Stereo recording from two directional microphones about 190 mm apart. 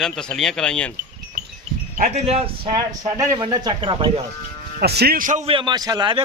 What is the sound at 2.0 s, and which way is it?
A man's voice, 35° right (ahead or behind).